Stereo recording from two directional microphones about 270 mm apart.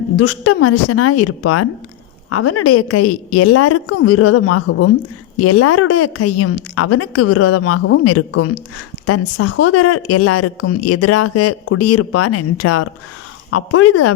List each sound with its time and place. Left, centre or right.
0.2 s speech: left